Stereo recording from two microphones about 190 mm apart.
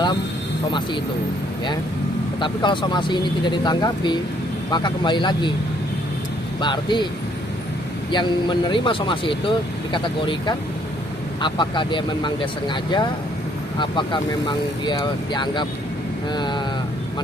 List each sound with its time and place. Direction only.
2.4 s speech: 25° left (ahead or behind)
6.6 s speech: 25° left (ahead or behind)
8.1 s speech: 25° left (ahead or behind)